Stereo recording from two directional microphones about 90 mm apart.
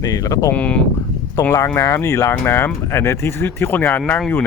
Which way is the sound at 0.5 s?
15° left (ahead or behind).